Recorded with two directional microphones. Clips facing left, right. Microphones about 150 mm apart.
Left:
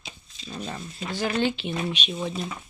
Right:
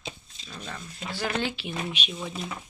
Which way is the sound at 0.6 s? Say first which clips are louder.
Left 2 dB; 25° left (ahead or behind).